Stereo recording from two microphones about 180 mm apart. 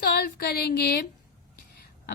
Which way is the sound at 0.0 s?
60° left (ahead or behind).